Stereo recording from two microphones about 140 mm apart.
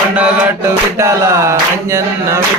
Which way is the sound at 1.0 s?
20° right (ahead or behind).